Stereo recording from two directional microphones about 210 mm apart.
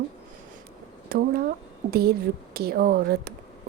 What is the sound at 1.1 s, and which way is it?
Speech, 45° right (ahead or behind).